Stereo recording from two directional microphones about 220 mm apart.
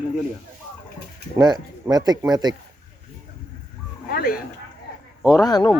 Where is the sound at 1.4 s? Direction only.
20° right (ahead or behind).